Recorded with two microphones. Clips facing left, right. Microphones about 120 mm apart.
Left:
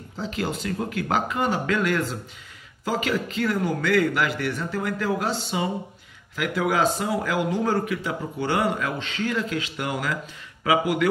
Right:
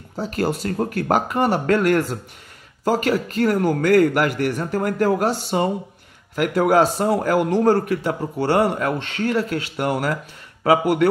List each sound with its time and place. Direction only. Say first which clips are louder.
0.6 s a man's voice: right 5 dB; 45° right (ahead or behind)
10.6 s speech: right 5 dB; 35° right (ahead or behind)